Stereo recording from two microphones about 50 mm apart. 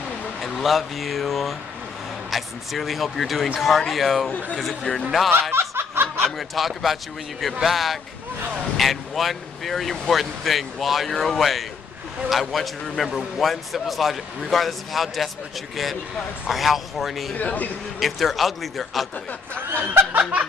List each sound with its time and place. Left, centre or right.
0.4 s a man's voice: centre
5.5 s snicker: right
6.3 s a man's voice: centre
17.4 s a man's voice: left
17.9 s a man's voice: centre
19.6 s speech: right
20.2 s snicker: right